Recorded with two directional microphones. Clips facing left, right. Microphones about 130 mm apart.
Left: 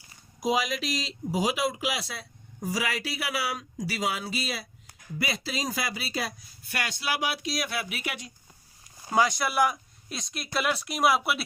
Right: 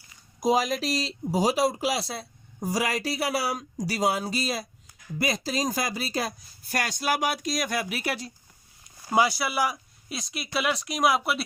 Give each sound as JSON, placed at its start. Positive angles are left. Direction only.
{"t": 0.3, "sound": "speech", "side_deg": -40}
{"t": 9.0, "sound": "speech", "side_deg": -10}